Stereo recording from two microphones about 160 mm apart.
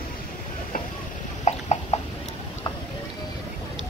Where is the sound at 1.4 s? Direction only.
45° left (ahead or behind).